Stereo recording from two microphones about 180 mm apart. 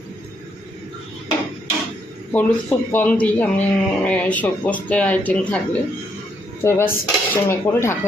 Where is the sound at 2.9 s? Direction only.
10° left (ahead or behind).